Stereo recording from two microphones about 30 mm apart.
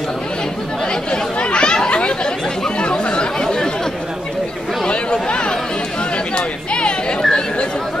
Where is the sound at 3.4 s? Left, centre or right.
Centre.